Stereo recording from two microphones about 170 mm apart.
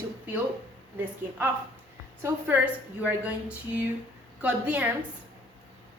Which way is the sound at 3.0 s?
10° right (ahead or behind).